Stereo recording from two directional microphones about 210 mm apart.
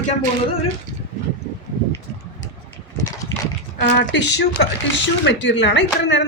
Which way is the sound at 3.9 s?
50° left (ahead or behind).